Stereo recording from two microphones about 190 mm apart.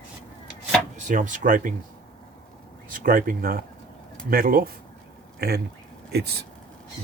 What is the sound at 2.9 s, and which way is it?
Speech, 45° right (ahead or behind).